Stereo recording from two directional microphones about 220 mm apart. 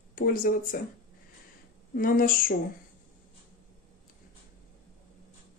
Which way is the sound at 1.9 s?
40° left (ahead or behind).